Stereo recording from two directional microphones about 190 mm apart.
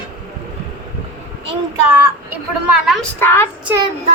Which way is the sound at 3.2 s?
10° left (ahead or behind).